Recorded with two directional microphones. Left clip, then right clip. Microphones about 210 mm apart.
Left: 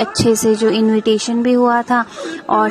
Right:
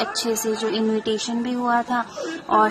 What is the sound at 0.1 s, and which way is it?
Speech, 65° left (ahead or behind).